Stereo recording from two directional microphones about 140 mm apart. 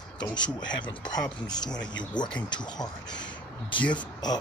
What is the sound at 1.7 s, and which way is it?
Speech, 5° left (ahead or behind).